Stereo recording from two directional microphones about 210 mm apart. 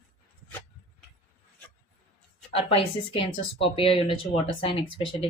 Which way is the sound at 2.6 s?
25° left (ahead or behind).